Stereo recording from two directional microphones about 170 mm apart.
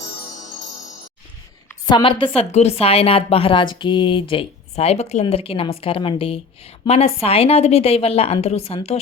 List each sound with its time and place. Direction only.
1.9 s a woman's voice: 30° left (ahead or behind)